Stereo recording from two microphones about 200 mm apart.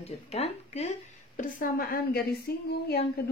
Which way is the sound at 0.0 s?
30° left (ahead or behind).